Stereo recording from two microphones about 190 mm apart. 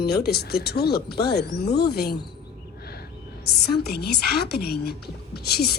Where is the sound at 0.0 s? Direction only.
55° left (ahead or behind).